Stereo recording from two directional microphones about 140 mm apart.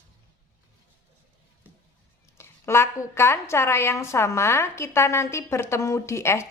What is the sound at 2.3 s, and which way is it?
A woman's voice, 20° left (ahead or behind).